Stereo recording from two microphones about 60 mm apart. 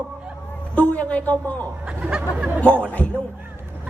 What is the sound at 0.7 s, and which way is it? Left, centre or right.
Speech, left.